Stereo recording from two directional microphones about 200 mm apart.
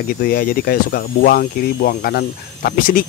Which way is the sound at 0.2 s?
45° left (ahead or behind).